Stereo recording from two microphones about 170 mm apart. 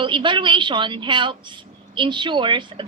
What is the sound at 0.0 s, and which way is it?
A woman's voice, 30° right (ahead or behind).